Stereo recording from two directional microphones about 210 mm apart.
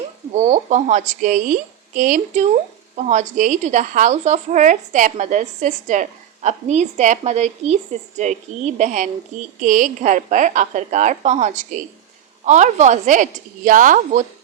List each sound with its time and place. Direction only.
0.3 s speech: 35° right (ahead or behind)